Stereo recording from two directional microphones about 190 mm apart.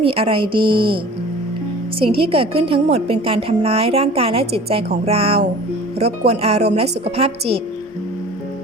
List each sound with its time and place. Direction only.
0.0 s a woman's voice: 30° right (ahead or behind)
2.0 s a woman's voice: 30° right (ahead or behind)